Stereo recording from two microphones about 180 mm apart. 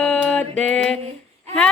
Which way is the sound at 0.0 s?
5° left (ahead or behind).